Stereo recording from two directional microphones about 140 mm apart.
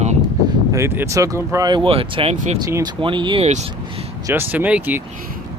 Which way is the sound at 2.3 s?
60° right (ahead or behind).